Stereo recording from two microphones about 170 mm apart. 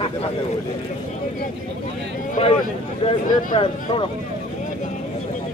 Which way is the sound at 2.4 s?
35° left (ahead or behind).